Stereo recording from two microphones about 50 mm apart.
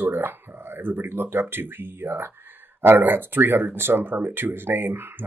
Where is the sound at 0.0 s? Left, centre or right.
Right.